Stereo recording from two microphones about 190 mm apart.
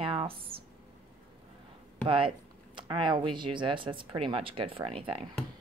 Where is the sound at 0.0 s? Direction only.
30° right (ahead or behind).